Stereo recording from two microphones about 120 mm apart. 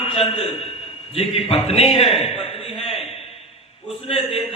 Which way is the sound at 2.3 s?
55° left (ahead or behind).